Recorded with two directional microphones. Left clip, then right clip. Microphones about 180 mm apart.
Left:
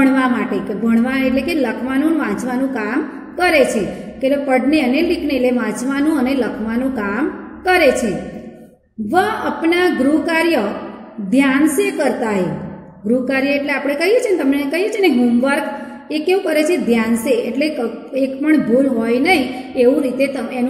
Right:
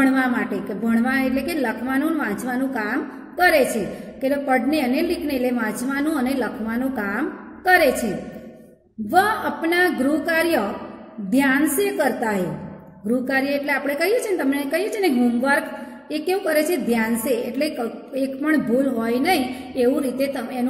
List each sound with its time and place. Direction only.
0.0 s a woman's voice: 20° right (ahead or behind)
9.1 s a woman's voice: 25° right (ahead or behind)